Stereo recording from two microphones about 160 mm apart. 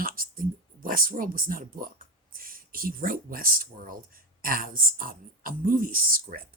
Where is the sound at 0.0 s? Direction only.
65° right (ahead or behind).